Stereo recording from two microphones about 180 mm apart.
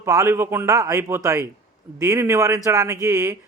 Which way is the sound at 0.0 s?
15° right (ahead or behind).